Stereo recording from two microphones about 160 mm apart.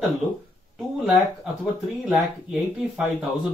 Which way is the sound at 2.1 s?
5° right (ahead or behind).